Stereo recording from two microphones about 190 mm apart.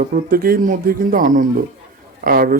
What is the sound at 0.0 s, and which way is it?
A man's voice, 50° right (ahead or behind).